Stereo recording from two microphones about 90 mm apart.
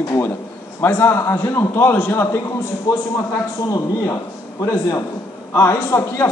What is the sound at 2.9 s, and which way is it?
A man's voice, 35° left (ahead or behind).